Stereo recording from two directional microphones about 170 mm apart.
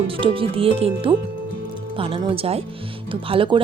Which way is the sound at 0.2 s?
35° right (ahead or behind).